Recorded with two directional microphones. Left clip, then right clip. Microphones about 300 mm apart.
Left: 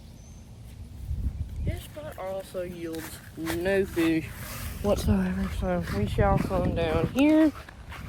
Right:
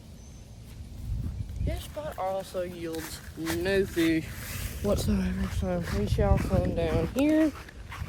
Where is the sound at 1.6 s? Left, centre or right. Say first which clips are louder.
Right 3 dB; centre.